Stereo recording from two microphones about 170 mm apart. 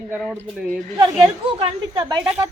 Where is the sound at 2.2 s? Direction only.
10° right (ahead or behind).